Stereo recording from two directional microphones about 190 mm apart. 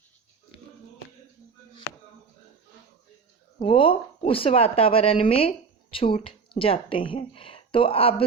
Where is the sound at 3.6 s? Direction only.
30° left (ahead or behind).